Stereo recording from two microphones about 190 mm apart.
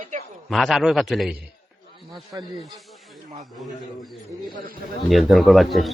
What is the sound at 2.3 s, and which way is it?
Speech, 20° right (ahead or behind).